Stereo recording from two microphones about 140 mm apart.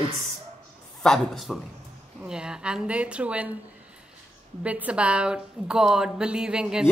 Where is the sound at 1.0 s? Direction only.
Centre (ahead or behind).